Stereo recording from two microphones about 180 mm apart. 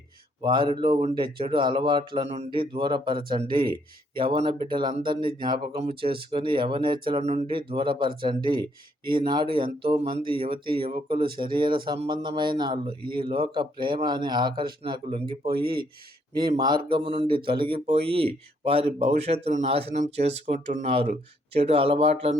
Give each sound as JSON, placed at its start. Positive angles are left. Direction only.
{"t": 0.4, "sound": "speech", "side_deg": -25}